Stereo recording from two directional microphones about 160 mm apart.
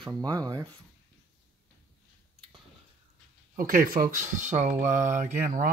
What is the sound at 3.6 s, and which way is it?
Speech, 60° right (ahead or behind).